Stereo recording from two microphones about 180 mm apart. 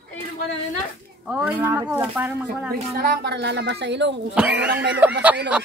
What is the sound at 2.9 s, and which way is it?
Speech, 60° right (ahead or behind).